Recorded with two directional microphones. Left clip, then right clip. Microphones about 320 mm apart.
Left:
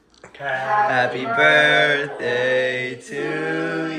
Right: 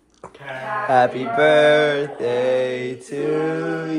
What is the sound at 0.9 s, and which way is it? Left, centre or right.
Mantra, centre.